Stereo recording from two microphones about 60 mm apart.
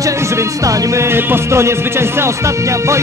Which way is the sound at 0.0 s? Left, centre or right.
Right.